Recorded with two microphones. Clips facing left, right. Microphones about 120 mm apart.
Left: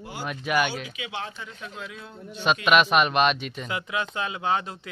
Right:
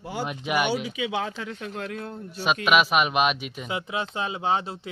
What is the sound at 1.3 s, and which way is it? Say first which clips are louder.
Speech: right 5 dB; 85° right.